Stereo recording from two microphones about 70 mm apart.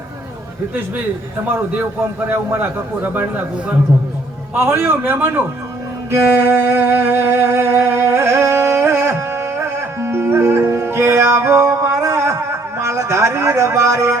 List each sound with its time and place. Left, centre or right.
1.5 s a man's voice: right
4.5 s a man's voice: right
6.1 s music: right